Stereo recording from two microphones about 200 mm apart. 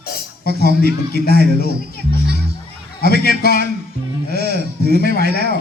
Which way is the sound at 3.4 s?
50° left (ahead or behind).